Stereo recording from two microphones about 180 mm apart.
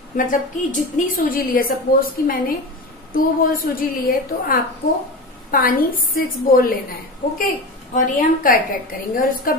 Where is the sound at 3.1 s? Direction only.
50° left (ahead or behind).